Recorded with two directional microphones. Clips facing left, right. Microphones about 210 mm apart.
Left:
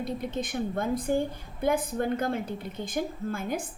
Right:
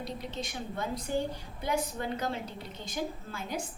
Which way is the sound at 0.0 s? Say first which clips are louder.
Left 6 dB; 50° left (ahead or behind).